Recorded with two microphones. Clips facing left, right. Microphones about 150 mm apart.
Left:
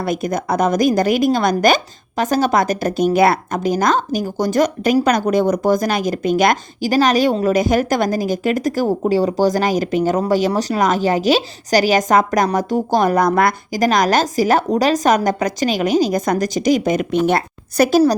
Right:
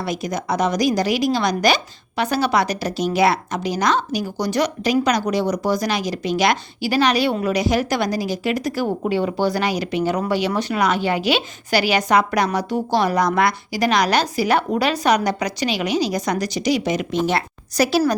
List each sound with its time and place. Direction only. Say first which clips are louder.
0.0 s speech: left 4 dB; 50° left (ahead or behind)